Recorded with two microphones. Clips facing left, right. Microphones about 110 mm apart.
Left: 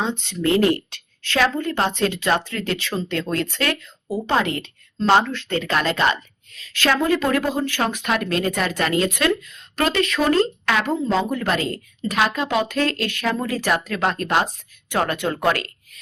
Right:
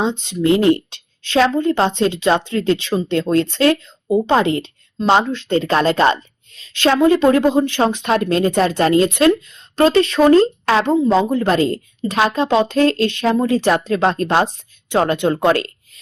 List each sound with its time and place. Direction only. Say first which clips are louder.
0.0 s speech: right 5 dB; 20° right (ahead or behind)